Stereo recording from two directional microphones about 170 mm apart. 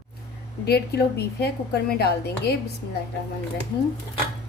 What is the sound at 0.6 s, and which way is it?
A woman's voice, 70° left (ahead or behind).